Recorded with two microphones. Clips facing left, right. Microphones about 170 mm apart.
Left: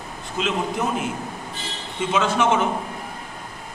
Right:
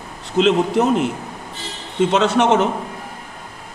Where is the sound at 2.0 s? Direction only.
70° right (ahead or behind).